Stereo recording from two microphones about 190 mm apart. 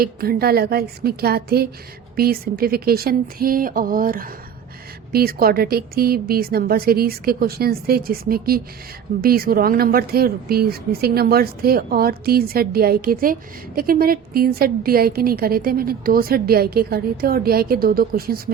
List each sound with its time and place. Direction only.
0.0 s speech: 55° right (ahead or behind)